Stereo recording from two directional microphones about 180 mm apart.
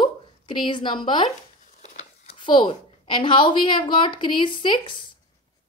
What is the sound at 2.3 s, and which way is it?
A woman's voice, 25° left (ahead or behind).